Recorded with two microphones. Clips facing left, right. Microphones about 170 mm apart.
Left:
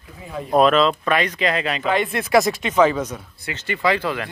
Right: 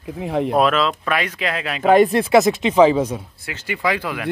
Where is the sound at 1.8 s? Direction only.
45° right (ahead or behind); by 3.2 s 30° right (ahead or behind).